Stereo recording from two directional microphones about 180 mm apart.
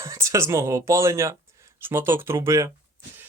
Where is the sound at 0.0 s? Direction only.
15° right (ahead or behind).